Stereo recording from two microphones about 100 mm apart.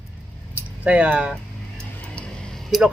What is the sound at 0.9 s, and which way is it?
Speech, 10° right (ahead or behind).